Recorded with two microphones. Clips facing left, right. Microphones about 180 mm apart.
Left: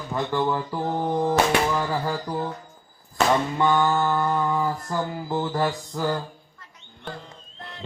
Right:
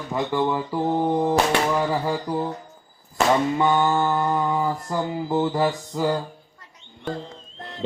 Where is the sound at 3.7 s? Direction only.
15° right (ahead or behind).